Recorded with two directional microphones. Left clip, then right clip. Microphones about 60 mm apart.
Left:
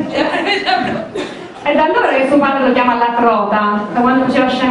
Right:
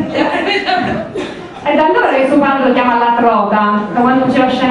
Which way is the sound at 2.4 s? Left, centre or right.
Left.